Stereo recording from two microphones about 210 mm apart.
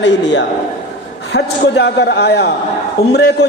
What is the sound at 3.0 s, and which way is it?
Speech, 15° left (ahead or behind).